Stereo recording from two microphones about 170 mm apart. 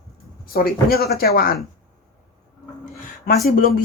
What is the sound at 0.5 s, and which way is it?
Speech, 65° left (ahead or behind).